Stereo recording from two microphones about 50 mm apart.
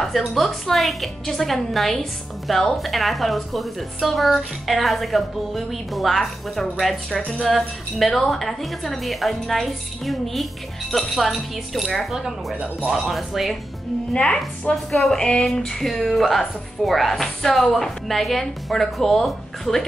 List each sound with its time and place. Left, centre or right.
0.0 s a woman's voice: centre
7.2 s speech: left
7.4 s a woman's voice: centre
12.1 s a woman's voice: centre
14.1 s a sound: centre
14.7 s a woman's voice: centre
15.1 s a sound: centre
15.9 s a woman's voice: centre